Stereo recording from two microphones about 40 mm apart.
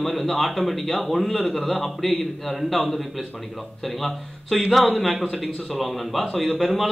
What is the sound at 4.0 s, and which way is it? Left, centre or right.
A man's voice, centre.